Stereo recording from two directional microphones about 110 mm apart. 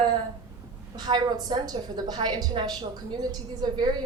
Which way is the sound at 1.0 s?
40° right (ahead or behind).